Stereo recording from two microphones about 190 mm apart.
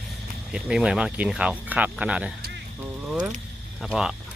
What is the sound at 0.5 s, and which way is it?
Speech, 5° right (ahead or behind).